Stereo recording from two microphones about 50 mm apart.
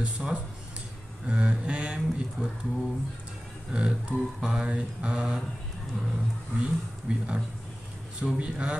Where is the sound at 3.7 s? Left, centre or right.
Centre.